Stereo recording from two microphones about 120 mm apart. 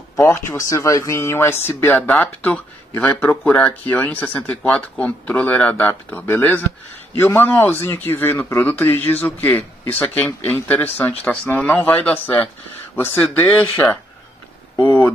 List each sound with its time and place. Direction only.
0.1 s speech: 20° left (ahead or behind)